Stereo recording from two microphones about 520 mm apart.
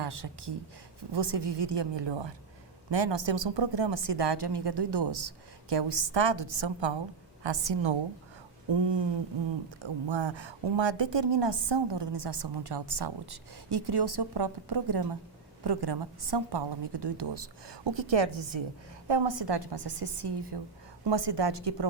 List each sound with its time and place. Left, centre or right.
0.0 s a woman's voice: right